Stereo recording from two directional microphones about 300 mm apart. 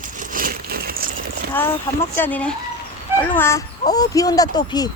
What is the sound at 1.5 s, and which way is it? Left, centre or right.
A woman's voice, centre.